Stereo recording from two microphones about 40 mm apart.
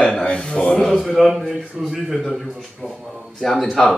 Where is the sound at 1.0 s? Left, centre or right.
Centre.